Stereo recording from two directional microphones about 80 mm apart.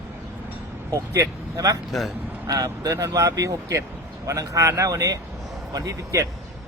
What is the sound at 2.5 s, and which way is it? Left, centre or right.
A man's voice, right.